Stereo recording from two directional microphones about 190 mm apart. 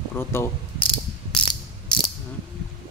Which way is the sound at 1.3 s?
25° left (ahead or behind).